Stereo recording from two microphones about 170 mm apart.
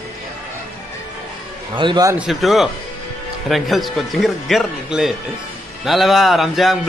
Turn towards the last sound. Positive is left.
turn(degrees=0)  # may be behind; listen again after turning